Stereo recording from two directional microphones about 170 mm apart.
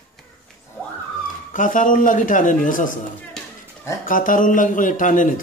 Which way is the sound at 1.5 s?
50° left (ahead or behind).